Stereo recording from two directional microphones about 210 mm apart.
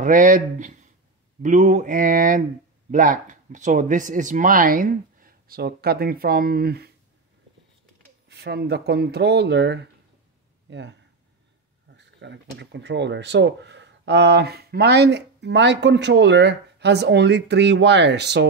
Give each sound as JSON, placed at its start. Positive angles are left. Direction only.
{"t": 0.0, "sound": "speech", "side_deg": -40}
{"t": 8.3, "sound": "speech", "side_deg": -55}